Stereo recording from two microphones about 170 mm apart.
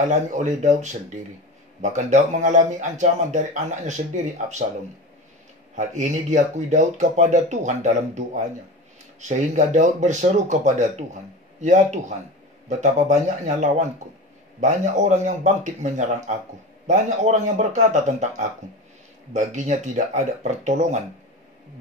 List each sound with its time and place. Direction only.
0.0 s speech: 45° right (ahead or behind)
5.8 s speech: 45° right (ahead or behind)